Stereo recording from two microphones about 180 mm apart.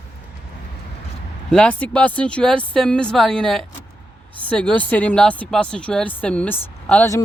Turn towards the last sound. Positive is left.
turn(degrees=10)  # may be behind; listen again after turning